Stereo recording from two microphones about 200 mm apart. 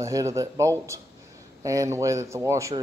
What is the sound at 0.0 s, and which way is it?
Speech, 15° right (ahead or behind).